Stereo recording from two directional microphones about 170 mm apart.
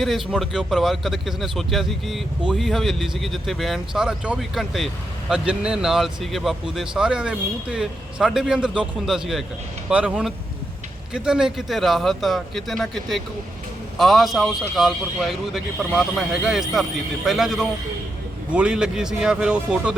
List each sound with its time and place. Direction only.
0.0 s a man's voice: centre (ahead or behind)